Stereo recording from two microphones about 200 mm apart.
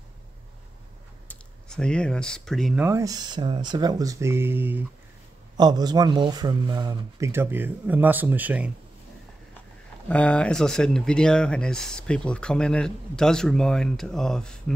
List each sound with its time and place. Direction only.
1.3 s speech: 5° left (ahead or behind)
2.8 s speech: 15° right (ahead or behind)
5.6 s speech: 20° right (ahead or behind)
10.0 s speech: 5° left (ahead or behind)